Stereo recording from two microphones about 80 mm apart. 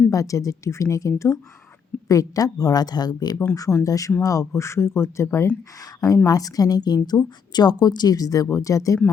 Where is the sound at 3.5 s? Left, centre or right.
Left.